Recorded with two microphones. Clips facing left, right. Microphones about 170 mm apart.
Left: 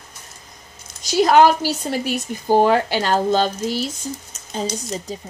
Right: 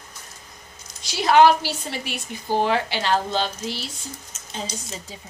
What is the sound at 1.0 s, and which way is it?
Speech, 45° left (ahead or behind).